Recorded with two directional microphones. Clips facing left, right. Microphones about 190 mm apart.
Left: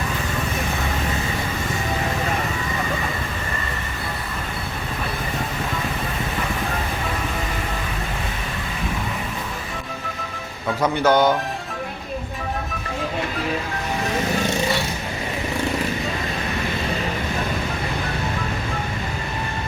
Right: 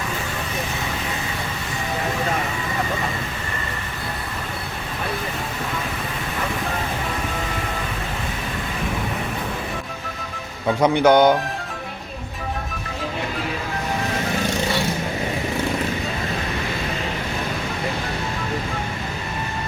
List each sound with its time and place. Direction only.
10.8 s speech: 15° right (ahead or behind)